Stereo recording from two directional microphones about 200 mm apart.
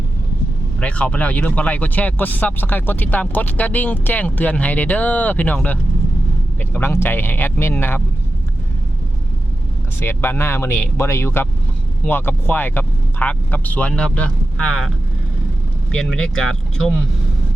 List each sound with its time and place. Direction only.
0.8 s speech: 5° left (ahead or behind)
10.0 s speech: 10° left (ahead or behind)
15.9 s speech: 5° left (ahead or behind)